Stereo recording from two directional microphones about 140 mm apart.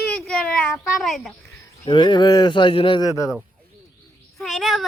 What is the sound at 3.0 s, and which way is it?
Speech, 25° left (ahead or behind).